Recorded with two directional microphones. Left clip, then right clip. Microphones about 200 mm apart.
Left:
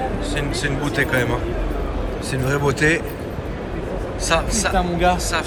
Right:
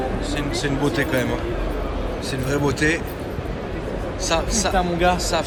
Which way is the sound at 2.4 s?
5° right (ahead or behind).